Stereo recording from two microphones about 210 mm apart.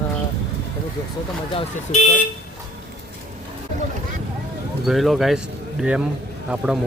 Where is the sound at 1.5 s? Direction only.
35° left (ahead or behind).